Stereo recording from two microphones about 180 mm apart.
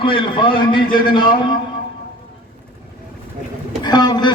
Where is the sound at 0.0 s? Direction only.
25° left (ahead or behind).